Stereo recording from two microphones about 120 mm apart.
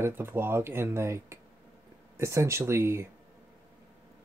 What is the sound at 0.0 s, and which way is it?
Speech, 20° right (ahead or behind).